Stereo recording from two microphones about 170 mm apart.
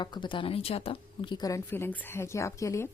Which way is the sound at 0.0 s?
25° left (ahead or behind).